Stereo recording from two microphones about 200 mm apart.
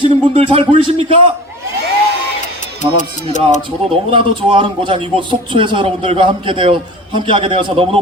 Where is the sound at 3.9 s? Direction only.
25° right (ahead or behind).